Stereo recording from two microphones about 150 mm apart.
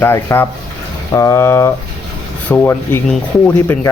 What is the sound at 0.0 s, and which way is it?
Speech, 15° left (ahead or behind).